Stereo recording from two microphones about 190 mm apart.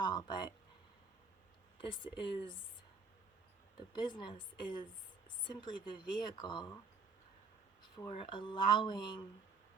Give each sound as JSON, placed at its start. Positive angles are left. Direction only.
{"t": 0.0, "sound": "a sound", "side_deg": 25}
{"t": 1.8, "sound": "speech", "side_deg": 25}
{"t": 3.9, "sound": "speech", "side_deg": 25}
{"t": 7.8, "sound": "speech", "side_deg": 25}